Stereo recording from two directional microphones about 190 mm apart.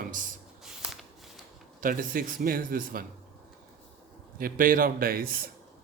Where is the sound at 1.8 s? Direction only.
45° right (ahead or behind).